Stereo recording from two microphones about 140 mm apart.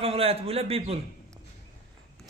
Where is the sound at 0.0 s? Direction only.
45° right (ahead or behind).